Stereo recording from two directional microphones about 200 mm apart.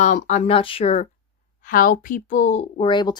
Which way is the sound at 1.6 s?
45° left (ahead or behind).